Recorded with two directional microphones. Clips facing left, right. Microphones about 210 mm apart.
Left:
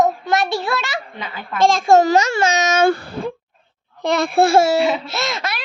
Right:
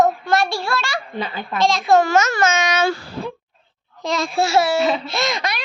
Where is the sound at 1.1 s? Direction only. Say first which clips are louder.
Right 5 dB; 30° right (ahead or behind).